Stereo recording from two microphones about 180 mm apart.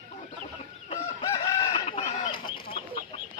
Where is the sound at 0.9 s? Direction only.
35° left (ahead or behind).